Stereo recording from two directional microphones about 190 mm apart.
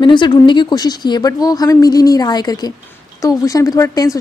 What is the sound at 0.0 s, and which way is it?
Speech, 25° left (ahead or behind).